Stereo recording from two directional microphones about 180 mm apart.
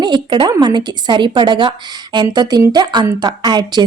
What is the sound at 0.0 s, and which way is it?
A woman's voice, 25° right (ahead or behind).